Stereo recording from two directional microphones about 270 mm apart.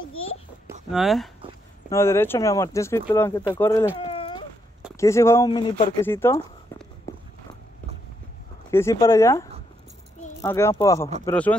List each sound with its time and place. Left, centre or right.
0.1 s a sound: left
0.9 s speech: centre
4.0 s baby cry: centre
4.9 s speech: centre
7.1 s walk: centre
8.6 s speech: centre